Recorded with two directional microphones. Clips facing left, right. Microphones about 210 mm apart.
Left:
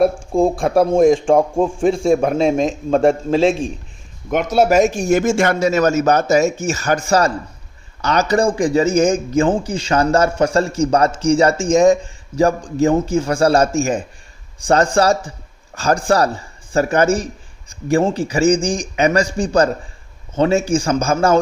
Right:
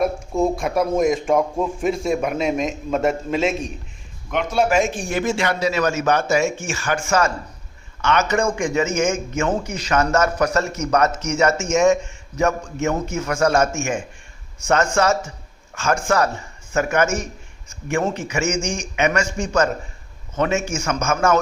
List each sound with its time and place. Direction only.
0.0 s speech: 30° left (ahead or behind)
4.3 s speech: 45° left (ahead or behind)